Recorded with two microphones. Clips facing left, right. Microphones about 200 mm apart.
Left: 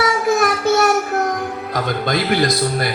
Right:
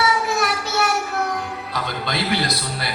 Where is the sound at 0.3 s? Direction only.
50° left (ahead or behind).